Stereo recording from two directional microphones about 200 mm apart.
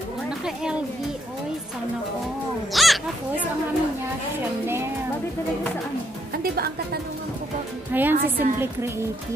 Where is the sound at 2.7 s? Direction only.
Centre (ahead or behind).